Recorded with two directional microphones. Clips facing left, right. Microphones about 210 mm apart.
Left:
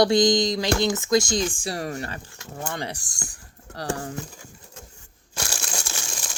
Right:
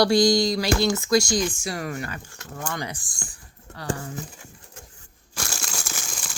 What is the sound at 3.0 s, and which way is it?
Speech, 40° left (ahead or behind).